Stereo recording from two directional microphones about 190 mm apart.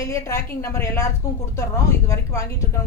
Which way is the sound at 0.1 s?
15° left (ahead or behind).